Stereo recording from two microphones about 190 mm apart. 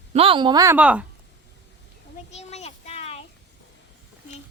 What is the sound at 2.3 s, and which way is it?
Child singing, 35° left (ahead or behind).